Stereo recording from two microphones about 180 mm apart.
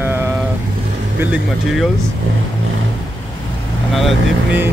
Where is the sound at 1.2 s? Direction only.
5° right (ahead or behind).